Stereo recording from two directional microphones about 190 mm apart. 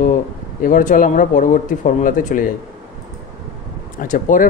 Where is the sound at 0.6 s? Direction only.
45° left (ahead or behind).